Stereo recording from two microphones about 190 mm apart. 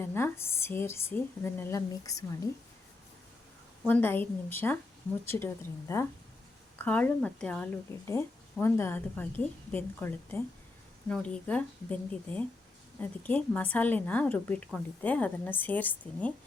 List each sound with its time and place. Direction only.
0.0 s a woman's voice: 10° left (ahead or behind)
3.8 s a woman's voice: 10° left (ahead or behind)